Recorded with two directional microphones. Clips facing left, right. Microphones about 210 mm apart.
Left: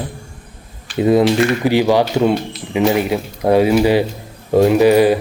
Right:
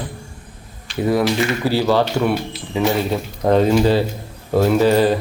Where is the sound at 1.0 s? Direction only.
20° left (ahead or behind).